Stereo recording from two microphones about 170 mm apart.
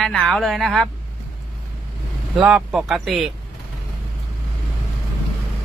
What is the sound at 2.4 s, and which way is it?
Speech, 5° right (ahead or behind).